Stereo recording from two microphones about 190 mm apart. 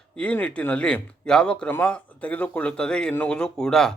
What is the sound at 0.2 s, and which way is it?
Speech, 5° left (ahead or behind).